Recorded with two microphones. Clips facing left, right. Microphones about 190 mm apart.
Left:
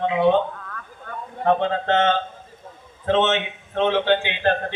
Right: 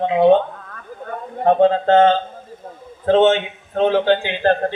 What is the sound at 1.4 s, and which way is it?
A man's voice, 35° right (ahead or behind).